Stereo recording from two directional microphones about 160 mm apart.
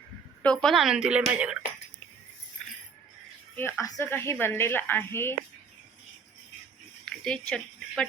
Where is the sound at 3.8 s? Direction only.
20° left (ahead or behind).